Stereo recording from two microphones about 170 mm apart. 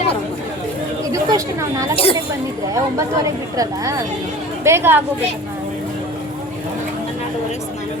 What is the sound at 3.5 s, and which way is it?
Speech, 20° right (ahead or behind).